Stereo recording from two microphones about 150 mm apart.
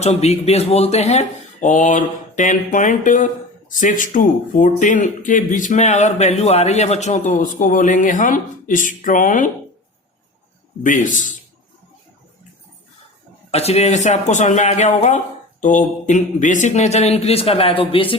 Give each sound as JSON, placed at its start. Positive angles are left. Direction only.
{"t": 0.0, "sound": "speech", "side_deg": 45}
{"t": 10.8, "sound": "speech", "side_deg": 60}
{"t": 13.5, "sound": "speech", "side_deg": 45}